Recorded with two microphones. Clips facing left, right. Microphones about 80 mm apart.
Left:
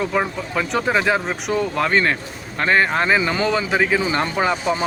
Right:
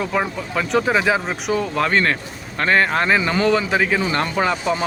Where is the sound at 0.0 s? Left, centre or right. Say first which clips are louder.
Left 1 dB; centre.